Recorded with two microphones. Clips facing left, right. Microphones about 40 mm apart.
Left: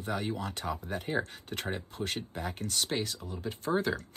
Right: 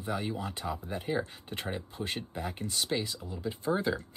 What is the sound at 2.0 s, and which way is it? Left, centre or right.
Speech, centre.